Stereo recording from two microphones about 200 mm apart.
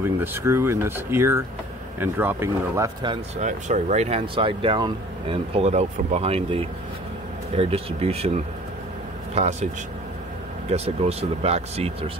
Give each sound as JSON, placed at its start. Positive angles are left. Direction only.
{"t": 0.0, "sound": "speech", "side_deg": -10}
{"t": 3.3, "sound": "speech", "side_deg": -35}
{"t": 10.7, "sound": "speech", "side_deg": -30}